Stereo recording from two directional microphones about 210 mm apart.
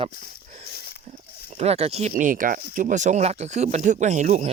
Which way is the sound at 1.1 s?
30° right (ahead or behind).